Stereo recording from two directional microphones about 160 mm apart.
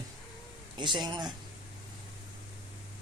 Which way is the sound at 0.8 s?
30° right (ahead or behind).